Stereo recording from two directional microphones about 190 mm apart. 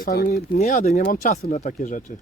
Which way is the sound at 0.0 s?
50° left (ahead or behind).